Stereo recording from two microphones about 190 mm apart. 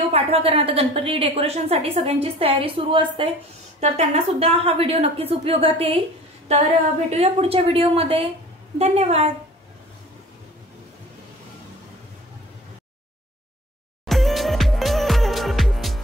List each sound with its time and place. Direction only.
0.1 s a woman's voice: 30° right (ahead or behind)
14.0 s music: centre (ahead or behind)